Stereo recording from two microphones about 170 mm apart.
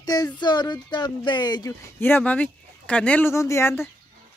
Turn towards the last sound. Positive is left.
turn(degrees=15)  # may be behind; listen again after turning